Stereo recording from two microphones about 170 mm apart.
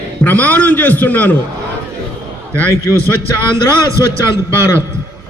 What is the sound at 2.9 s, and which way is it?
Speech, 15° left (ahead or behind).